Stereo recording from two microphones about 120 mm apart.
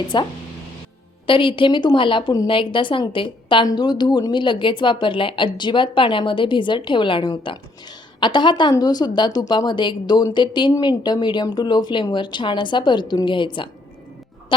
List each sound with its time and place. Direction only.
0.1 s a woman's voice: 40° left (ahead or behind)